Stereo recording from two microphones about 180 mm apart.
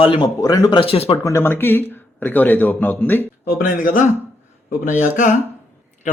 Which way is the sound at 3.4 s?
50° left (ahead or behind).